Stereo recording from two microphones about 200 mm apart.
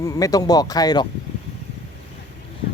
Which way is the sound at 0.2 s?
20° left (ahead or behind).